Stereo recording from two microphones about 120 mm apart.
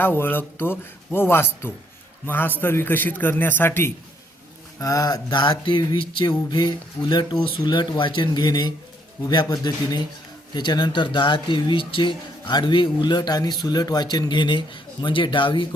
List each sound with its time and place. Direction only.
0.0 s a man's voice: 20° left (ahead or behind)
4.8 s speech: 30° left (ahead or behind)